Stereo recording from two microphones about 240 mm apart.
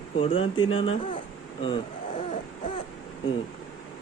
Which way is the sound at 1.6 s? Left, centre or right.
Left.